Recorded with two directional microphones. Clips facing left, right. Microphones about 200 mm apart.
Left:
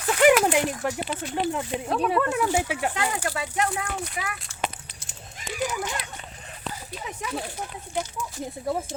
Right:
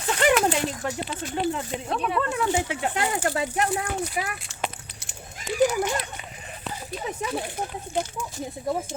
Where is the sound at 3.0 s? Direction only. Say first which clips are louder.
Right 2 dB; 25° right (ahead or behind).